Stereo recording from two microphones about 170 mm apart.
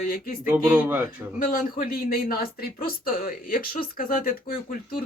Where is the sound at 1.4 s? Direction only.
55° left (ahead or behind).